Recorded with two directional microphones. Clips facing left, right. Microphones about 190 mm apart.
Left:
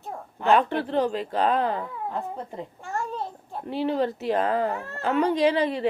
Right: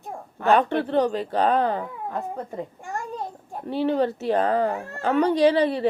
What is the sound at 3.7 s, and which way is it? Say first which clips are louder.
A woman's voice: right 3 dB; 30° right (ahead or behind).